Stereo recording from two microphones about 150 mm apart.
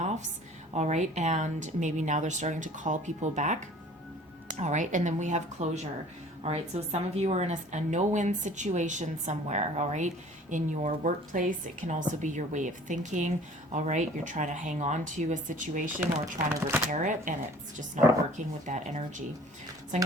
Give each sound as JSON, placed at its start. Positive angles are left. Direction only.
{"t": 0.0, "sound": "a sound", "side_deg": -50}
{"t": 0.7, "sound": "a woman's voice", "side_deg": -50}
{"t": 16.9, "sound": "a woman's voice", "side_deg": -60}